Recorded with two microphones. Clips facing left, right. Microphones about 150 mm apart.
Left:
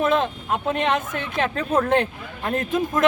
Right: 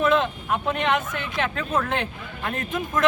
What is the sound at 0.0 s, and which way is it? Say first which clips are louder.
Speech: even; 40° left (ahead or behind).